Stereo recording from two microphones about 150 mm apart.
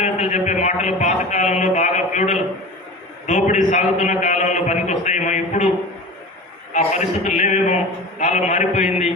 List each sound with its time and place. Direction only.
0.0 s a man's voice: 50° left (ahead or behind)
6.7 s a man's voice: 55° left (ahead or behind)